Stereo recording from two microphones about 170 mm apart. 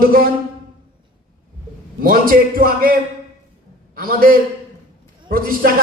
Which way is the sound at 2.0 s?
55° right (ahead or behind).